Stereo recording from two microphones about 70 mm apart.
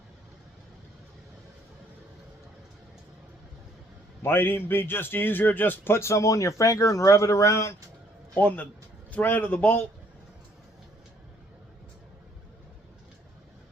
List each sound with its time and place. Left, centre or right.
4.2 s a man's voice: left
8.4 s a man's voice: left